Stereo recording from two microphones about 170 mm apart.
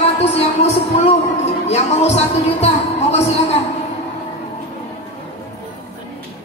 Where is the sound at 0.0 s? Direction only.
35° left (ahead or behind).